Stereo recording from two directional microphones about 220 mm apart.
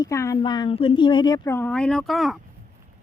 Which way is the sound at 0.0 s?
15° left (ahead or behind).